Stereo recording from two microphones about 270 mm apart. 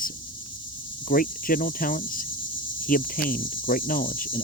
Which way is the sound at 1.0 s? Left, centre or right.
Left.